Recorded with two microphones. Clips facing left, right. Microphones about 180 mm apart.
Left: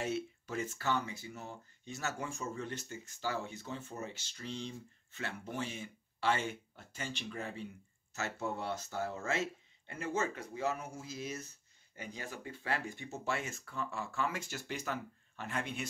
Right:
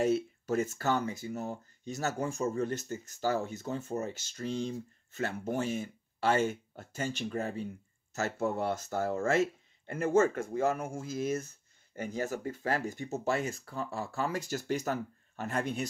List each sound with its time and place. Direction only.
0.0 s speech: 40° right (ahead or behind)